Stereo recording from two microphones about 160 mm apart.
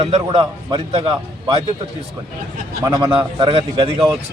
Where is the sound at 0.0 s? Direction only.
40° right (ahead or behind).